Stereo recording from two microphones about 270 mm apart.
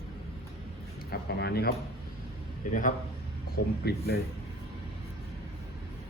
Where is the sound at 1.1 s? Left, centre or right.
Left.